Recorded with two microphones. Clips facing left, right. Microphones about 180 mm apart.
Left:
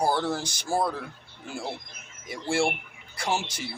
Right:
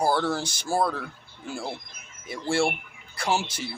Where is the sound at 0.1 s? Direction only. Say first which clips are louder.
Right 2 dB; 15° left (ahead or behind).